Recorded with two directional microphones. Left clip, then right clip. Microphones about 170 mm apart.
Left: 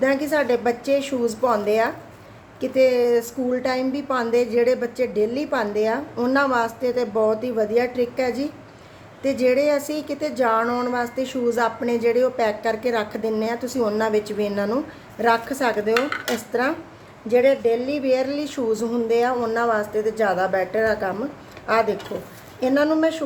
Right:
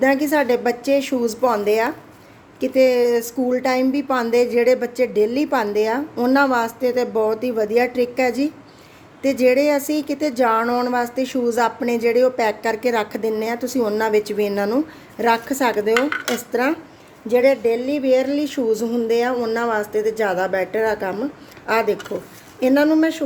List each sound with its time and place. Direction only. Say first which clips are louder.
0.0 s a woman's voice: right 3 dB; 40° right (ahead or behind)